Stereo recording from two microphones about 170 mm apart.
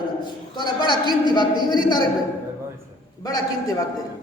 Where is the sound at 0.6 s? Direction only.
25° left (ahead or behind).